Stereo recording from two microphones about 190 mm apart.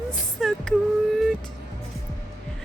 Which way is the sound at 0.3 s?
Centre (ahead or behind).